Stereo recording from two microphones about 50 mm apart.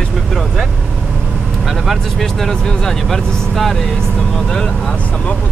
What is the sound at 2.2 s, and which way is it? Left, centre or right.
Speech, centre.